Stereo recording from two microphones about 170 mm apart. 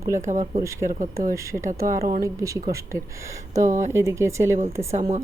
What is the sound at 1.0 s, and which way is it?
Speech, 50° right (ahead or behind).